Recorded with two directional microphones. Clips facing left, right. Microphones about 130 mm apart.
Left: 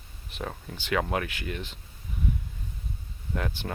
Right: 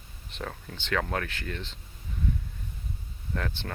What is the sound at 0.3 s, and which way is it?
Speech, 10° left (ahead or behind).